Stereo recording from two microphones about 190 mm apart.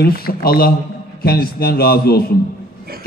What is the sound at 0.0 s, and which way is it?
A man's voice, 55° left (ahead or behind).